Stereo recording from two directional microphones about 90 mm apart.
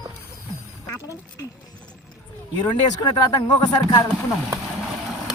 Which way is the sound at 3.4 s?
55° left (ahead or behind).